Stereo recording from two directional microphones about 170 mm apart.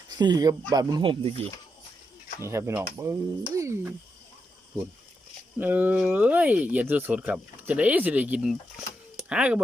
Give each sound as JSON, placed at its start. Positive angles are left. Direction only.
{"t": 0.2, "sound": "speech", "side_deg": -25}
{"t": 2.4, "sound": "speech", "side_deg": -15}
{"t": 5.5, "sound": "speech", "side_deg": -10}